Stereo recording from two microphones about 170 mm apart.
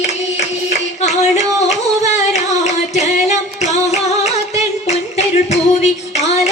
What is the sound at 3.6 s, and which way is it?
Music, 40° left (ahead or behind).